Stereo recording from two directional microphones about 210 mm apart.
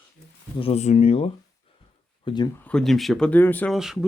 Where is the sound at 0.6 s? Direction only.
30° left (ahead or behind).